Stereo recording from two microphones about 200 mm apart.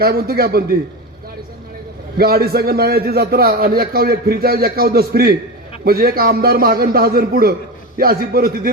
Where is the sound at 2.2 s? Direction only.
50° right (ahead or behind).